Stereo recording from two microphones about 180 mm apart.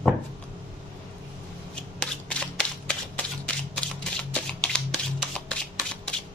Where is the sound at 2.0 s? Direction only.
5° left (ahead or behind).